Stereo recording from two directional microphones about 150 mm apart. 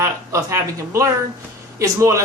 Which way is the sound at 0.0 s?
20° right (ahead or behind).